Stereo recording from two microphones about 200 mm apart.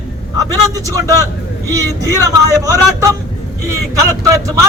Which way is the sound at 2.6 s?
15° right (ahead or behind).